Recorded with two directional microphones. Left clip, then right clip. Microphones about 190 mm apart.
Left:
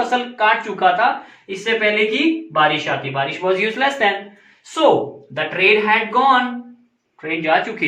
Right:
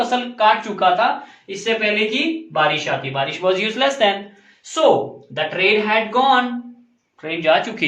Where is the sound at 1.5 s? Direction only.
15° right (ahead or behind).